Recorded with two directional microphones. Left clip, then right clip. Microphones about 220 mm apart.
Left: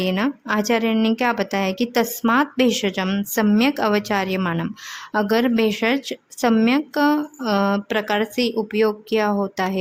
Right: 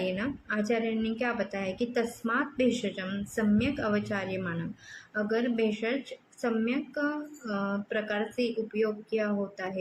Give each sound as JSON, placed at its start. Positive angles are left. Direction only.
{"t": 0.0, "sound": "a woman's voice", "side_deg": 50}